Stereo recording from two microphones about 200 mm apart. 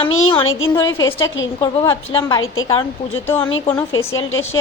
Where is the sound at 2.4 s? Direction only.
85° left.